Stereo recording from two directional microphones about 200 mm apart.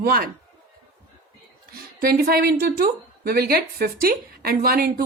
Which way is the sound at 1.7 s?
50° right (ahead or behind).